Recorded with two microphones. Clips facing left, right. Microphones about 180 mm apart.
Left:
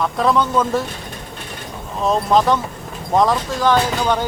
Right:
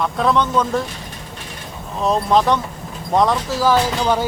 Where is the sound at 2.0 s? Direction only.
Centre (ahead or behind).